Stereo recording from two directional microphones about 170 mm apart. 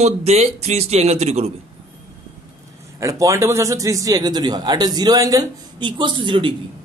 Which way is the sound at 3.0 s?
20° right (ahead or behind).